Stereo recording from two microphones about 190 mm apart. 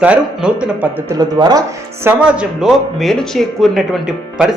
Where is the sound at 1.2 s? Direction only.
20° right (ahead or behind).